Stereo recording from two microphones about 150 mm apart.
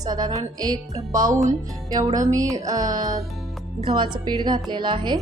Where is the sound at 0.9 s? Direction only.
60° right (ahead or behind).